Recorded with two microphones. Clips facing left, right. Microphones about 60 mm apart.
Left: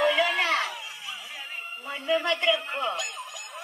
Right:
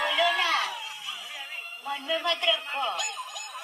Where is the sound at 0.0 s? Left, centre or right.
Left.